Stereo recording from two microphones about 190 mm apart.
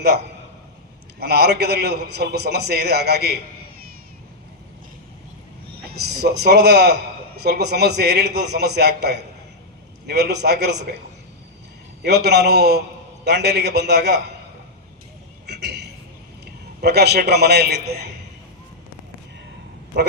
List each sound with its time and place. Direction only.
1.2 s a man's voice: 60° right (ahead or behind)
5.7 s a man's voice: 60° right (ahead or behind)
12.0 s a man's voice: 60° right (ahead or behind)
15.4 s a sound: 60° right (ahead or behind)
16.8 s a man's voice: 60° right (ahead or behind)
19.9 s a man's voice: 65° right (ahead or behind)